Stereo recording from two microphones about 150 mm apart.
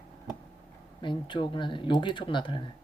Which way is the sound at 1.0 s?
30° left (ahead or behind).